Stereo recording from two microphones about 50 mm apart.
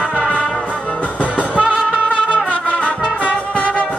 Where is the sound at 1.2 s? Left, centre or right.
Right.